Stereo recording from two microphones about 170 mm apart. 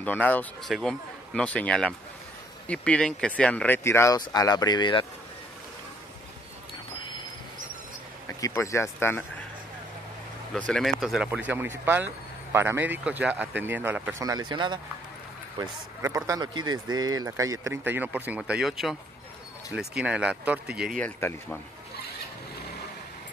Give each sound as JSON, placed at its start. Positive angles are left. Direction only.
{"t": 0.0, "sound": "speech", "side_deg": 10}
{"t": 8.4, "sound": "speech", "side_deg": 20}
{"t": 10.7, "sound": "speech", "side_deg": 0}
{"t": 11.2, "sound": "speech", "side_deg": -10}
{"t": 14.2, "sound": "a man's voice", "side_deg": -25}
{"t": 21.0, "sound": "speech", "side_deg": 10}